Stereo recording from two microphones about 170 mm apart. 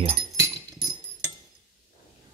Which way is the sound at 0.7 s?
20° right (ahead or behind).